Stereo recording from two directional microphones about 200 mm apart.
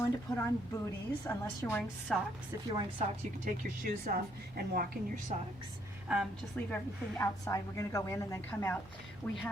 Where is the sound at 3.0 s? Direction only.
40° right (ahead or behind).